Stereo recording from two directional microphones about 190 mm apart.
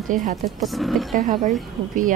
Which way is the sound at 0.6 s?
Centre (ahead or behind).